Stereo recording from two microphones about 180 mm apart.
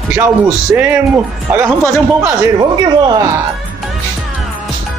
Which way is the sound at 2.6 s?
25° right (ahead or behind).